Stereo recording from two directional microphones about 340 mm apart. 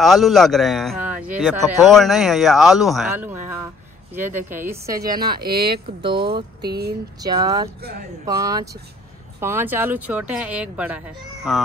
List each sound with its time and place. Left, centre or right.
0.0 s a woman's voice: centre
5.4 s speech: right
6.0 s a woman's voice: centre
6.6 s speech: right
7.2 s a woman's voice: centre